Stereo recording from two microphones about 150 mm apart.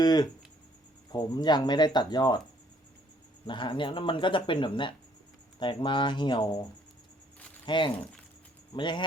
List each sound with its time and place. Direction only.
0.0 s speech: 30° left (ahead or behind)
3.4 s speech: 30° left (ahead or behind)